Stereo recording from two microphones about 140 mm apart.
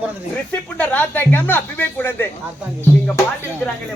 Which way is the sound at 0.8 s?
10° left (ahead or behind).